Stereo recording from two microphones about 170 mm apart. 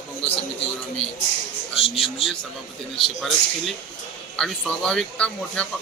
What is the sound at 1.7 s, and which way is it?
Speech, 35° left (ahead or behind).